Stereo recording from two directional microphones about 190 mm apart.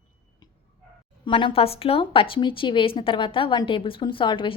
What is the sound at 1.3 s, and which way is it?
A woman's voice, 30° left (ahead or behind).